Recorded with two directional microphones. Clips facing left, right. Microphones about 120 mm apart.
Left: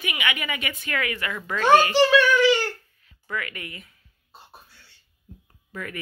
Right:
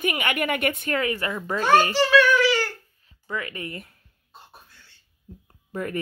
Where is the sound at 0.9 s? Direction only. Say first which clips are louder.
Right 3 dB; 30° right (ahead or behind).